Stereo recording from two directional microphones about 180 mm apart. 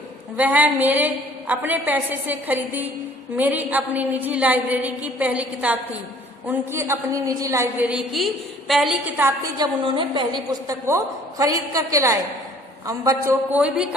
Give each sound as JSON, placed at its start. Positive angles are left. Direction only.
{"t": 0.3, "sound": "a woman's voice", "side_deg": -10}
{"t": 9.6, "sound": "a woman's voice", "side_deg": -30}